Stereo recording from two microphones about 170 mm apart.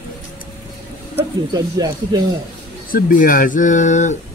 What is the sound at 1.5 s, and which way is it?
Speech, 20° right (ahead or behind).